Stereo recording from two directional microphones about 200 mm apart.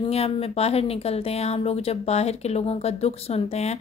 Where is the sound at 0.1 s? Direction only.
30° left (ahead or behind).